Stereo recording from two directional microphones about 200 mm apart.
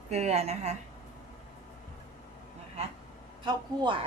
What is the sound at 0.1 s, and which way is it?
Speech, 35° right (ahead or behind).